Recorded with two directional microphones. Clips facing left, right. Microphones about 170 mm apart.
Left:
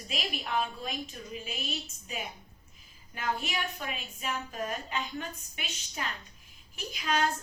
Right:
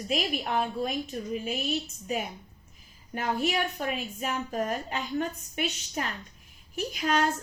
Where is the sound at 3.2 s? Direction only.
40° right (ahead or behind).